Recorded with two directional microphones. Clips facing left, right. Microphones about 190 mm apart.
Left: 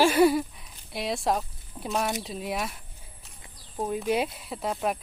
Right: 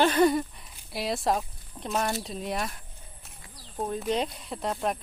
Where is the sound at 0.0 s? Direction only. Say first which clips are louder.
Left 2 dB; 10° left (ahead or behind).